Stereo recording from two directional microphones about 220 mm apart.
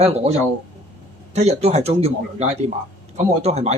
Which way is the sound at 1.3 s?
30° right (ahead or behind).